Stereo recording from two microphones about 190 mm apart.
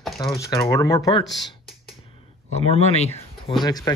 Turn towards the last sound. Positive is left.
turn(degrees=20)  # may be behind; listen again after turning